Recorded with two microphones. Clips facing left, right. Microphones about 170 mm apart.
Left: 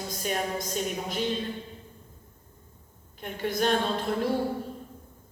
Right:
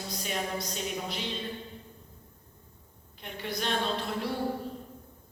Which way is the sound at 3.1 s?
45° left (ahead or behind).